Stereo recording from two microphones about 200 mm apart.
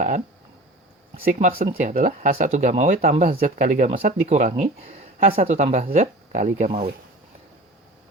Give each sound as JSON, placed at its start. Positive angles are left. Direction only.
{"t": 1.1, "sound": "speech", "side_deg": -40}